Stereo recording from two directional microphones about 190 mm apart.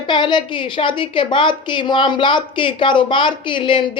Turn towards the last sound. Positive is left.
turn(degrees=25)  # may be behind; listen again after turning